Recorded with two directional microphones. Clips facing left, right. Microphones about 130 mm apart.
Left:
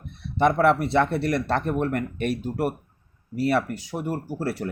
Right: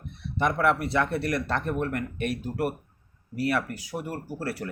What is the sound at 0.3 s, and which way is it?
Speech, 30° left (ahead or behind).